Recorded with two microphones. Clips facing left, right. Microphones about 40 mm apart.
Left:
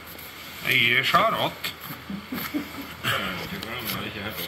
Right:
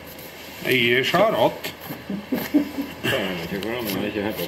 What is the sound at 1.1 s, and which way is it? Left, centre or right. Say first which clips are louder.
Speech: right 3 dB; centre.